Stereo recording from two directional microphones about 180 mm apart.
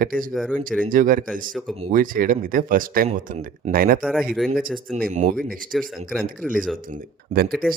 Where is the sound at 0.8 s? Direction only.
50° right (ahead or behind).